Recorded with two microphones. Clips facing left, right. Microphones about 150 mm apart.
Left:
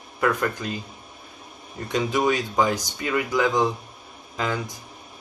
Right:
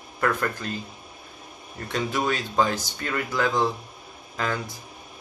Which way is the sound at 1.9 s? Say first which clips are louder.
Left 4 dB; 15° left (ahead or behind).